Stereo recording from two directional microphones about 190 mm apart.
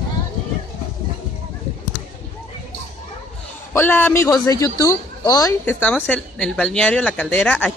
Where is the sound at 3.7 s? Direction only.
10° left (ahead or behind).